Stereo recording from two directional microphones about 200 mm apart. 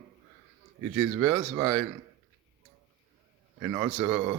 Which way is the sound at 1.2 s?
10° right (ahead or behind).